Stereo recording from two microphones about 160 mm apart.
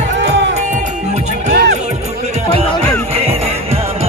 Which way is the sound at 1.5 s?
90° right.